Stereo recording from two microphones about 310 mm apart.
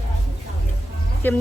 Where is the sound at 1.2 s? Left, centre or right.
Centre.